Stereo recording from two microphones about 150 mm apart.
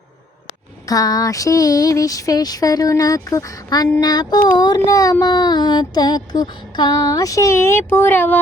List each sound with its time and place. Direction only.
0.9 s music: 25° left (ahead or behind)